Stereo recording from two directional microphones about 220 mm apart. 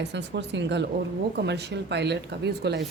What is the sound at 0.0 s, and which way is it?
A woman's voice, 55° right (ahead or behind).